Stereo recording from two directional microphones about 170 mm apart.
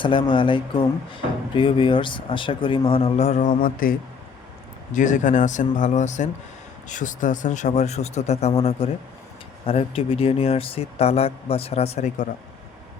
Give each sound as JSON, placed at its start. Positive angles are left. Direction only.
{"t": 0.0, "sound": "speech", "side_deg": 30}
{"t": 4.9, "sound": "speech", "side_deg": 50}